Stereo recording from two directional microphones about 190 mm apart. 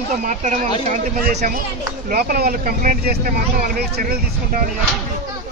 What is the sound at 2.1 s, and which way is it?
Speech, 50° right (ahead or behind).